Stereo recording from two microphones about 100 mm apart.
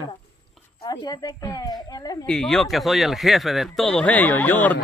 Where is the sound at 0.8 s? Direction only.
40° left (ahead or behind).